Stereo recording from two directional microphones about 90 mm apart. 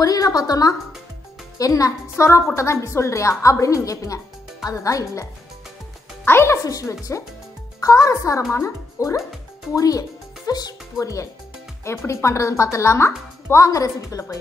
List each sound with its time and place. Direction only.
0.0 s a woman's voice: 45° left (ahead or behind)